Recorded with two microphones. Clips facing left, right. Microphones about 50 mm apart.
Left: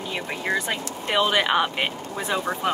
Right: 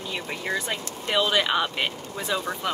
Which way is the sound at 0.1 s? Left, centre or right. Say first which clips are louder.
Left 3 dB; left.